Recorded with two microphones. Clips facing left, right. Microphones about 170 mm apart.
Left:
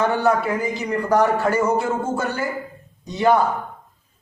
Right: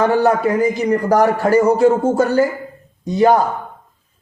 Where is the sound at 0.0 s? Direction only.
35° right (ahead or behind).